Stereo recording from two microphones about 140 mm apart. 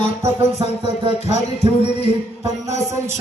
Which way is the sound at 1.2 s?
50° left (ahead or behind).